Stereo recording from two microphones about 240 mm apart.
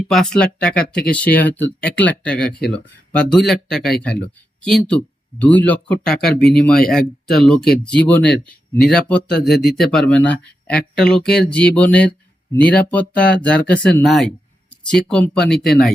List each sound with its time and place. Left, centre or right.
0.1 s speech: centre
2.5 s speech: left
2.7 s speech: centre